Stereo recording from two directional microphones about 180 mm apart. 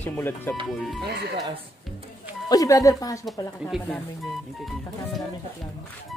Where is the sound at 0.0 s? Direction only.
10° left (ahead or behind).